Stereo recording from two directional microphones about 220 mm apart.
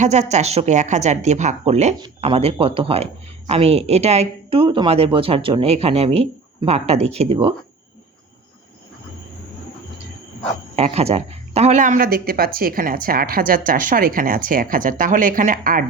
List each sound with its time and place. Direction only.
0.0 s speech: 30° right (ahead or behind)
10.8 s speech: 30° right (ahead or behind)